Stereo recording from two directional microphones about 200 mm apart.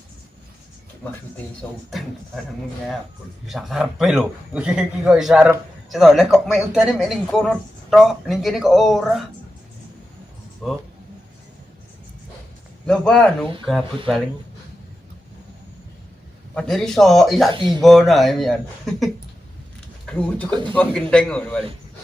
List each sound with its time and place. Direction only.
1.9 s a man's voice: centre (ahead or behind)
3.4 s a man's voice: centre (ahead or behind)
12.9 s a man's voice: 5° left (ahead or behind)
16.6 s a man's voice: 5° left (ahead or behind)
17.5 s speech: 20° right (ahead or behind)
17.8 s a man's voice: centre (ahead or behind)